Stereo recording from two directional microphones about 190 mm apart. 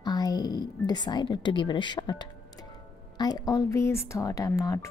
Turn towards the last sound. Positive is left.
turn(degrees=15)  # may be behind; listen again after turning